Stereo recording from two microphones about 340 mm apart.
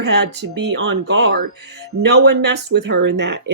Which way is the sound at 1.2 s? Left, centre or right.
Right.